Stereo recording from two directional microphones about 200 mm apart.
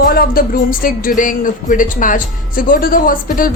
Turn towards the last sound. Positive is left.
turn(degrees=45)  # may be behind; listen again after turning